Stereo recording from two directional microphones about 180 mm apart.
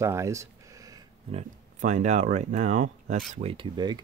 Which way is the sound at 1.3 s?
40° right (ahead or behind).